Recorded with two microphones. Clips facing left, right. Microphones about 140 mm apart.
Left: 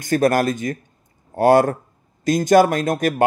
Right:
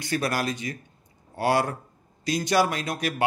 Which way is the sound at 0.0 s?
45° left (ahead or behind).